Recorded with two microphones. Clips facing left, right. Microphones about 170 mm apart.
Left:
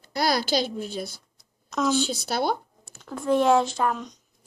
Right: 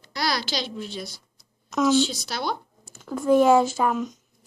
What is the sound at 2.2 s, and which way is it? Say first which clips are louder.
Speech: left 4 dB; 50° left (ahead or behind).